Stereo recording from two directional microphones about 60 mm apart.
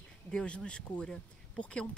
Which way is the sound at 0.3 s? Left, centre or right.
Centre.